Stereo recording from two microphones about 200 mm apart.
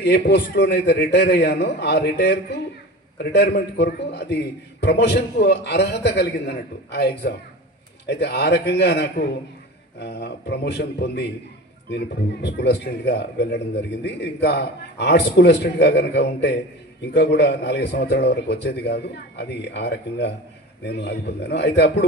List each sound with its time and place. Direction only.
0.0 s a man's voice: 55° left (ahead or behind)